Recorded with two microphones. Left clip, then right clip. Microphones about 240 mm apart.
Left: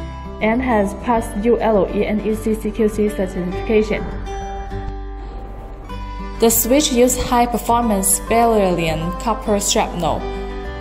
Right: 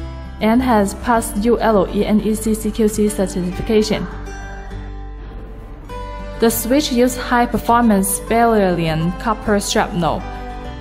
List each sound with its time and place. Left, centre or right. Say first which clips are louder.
0.4 s a woman's voice: right 2 dB; right
6.4 s a woman's voice: left 1 dB; centre